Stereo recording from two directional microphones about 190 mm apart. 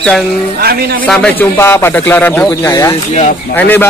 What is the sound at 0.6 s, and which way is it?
Speech, 55° right (ahead or behind).